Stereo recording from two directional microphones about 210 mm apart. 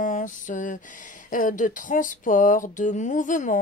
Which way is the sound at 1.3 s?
40° left (ahead or behind).